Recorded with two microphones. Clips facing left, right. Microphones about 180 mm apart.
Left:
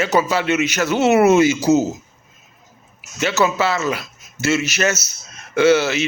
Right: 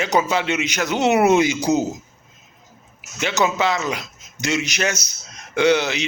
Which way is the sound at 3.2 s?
15° right (ahead or behind).